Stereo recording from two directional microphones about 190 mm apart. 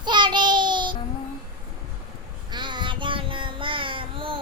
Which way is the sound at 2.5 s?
25° right (ahead or behind).